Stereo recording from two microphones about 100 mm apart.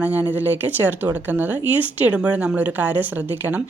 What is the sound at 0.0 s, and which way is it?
A woman's voice, 20° right (ahead or behind).